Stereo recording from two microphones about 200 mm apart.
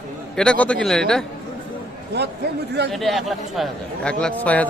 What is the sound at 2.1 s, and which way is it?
Speech, 55° right (ahead or behind).